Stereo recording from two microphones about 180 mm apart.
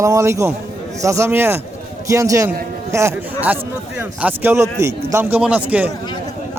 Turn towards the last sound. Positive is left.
turn(degrees=-10)  # may be behind; listen again after turning